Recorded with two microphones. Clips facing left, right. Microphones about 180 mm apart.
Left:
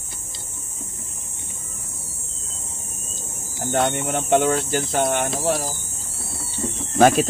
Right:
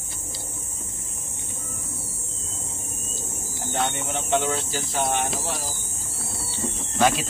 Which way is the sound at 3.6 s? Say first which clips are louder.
Left 6 dB; 65° left (ahead or behind).